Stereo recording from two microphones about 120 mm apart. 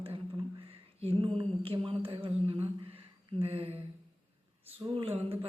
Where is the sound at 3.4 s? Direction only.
55° right (ahead or behind).